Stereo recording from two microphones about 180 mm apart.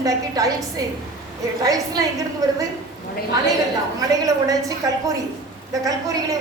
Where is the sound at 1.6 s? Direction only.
20° right (ahead or behind).